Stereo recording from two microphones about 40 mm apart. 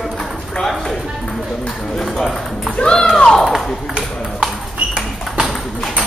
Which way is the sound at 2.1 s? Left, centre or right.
Centre.